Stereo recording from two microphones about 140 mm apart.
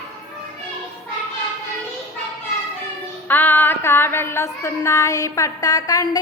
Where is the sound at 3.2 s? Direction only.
15° left (ahead or behind).